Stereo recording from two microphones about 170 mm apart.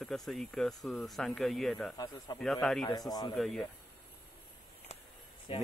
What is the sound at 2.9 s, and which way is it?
Speech, 25° left (ahead or behind).